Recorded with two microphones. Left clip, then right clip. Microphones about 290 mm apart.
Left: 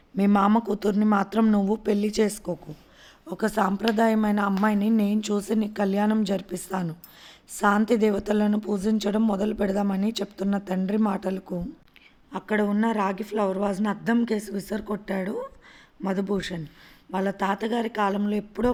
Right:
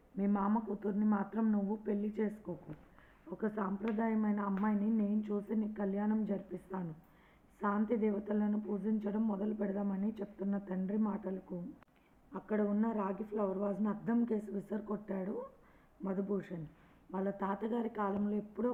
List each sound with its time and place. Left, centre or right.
0.2 s speech: left
12.3 s a man's voice: left